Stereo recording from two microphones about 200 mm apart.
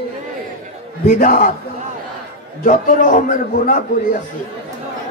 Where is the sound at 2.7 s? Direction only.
40° left (ahead or behind).